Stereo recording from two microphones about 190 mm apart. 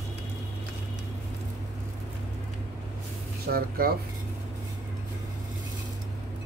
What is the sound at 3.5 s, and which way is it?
Speech, 55° right (ahead or behind).